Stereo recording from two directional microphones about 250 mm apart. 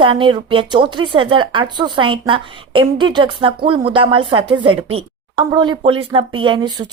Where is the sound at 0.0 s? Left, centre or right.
Centre.